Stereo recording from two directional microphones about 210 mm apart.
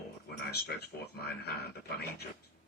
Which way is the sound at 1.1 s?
50° left (ahead or behind).